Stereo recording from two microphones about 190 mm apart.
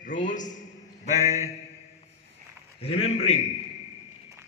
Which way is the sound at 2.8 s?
30° left (ahead or behind).